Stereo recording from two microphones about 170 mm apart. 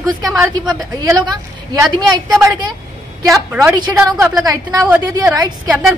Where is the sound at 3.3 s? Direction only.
15° right (ahead or behind).